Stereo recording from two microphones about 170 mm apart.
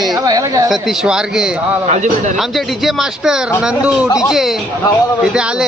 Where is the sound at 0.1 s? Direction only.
20° right (ahead or behind).